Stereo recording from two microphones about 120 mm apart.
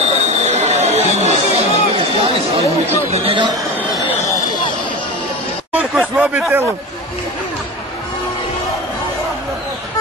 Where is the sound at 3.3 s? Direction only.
40° right (ahead or behind).